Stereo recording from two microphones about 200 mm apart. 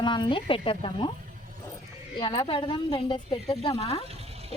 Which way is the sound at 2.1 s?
20° left (ahead or behind).